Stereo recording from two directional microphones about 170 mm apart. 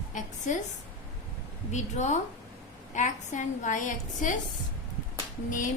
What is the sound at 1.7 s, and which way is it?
A woman's voice, 45° left (ahead or behind).